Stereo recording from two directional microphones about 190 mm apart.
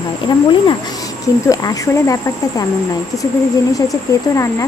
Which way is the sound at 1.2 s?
15° left (ahead or behind).